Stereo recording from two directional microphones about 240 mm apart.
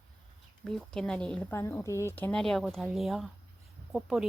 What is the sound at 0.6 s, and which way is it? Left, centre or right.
Speech, centre.